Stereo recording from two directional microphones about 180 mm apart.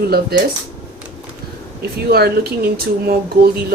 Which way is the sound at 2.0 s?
60° right (ahead or behind).